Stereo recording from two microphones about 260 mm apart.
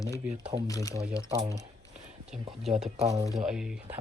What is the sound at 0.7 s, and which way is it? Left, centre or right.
Speech, centre.